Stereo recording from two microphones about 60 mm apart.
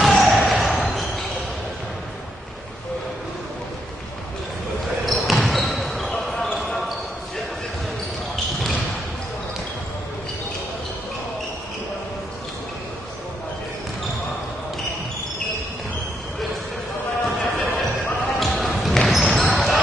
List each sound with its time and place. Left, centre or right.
0.0 s a sound: centre
4.8 s basketball bounce: centre
17.2 s clip-clop: centre
18.3 s basketball bounce: centre